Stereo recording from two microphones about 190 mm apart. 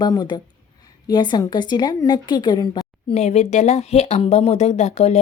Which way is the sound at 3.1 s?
35° left (ahead or behind).